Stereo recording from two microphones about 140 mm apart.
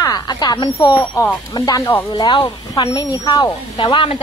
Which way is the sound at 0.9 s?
15° left (ahead or behind).